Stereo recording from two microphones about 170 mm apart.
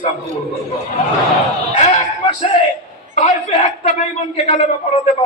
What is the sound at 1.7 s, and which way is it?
Speech, 40° left (ahead or behind).